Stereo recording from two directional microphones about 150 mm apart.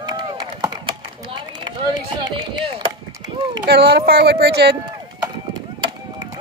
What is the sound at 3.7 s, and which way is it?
Speech, 90° right.